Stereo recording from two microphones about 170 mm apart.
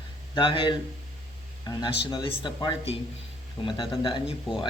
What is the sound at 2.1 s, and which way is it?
Speech, 25° left (ahead or behind).